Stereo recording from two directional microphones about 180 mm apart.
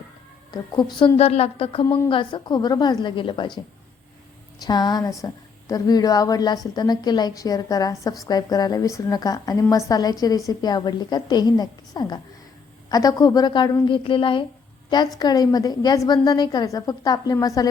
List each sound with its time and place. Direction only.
0.5 s a woman's voice: 25° left (ahead or behind)
4.6 s a woman's voice: 25° left (ahead or behind)